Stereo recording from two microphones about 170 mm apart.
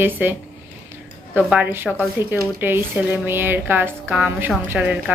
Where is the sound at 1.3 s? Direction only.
10° right (ahead or behind).